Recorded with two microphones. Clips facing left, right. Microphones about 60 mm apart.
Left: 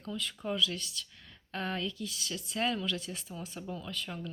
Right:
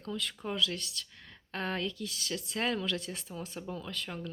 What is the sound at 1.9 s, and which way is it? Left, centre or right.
Speech, right.